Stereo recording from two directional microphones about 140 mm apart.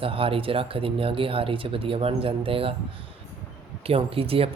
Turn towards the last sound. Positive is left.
turn(degrees=-40)  # may be behind; listen again after turning